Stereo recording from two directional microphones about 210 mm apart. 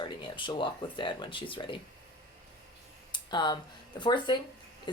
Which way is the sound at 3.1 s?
20° left (ahead or behind).